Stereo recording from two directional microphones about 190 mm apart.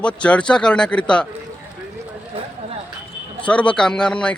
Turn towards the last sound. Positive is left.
turn(degrees=5)  # may be behind; listen again after turning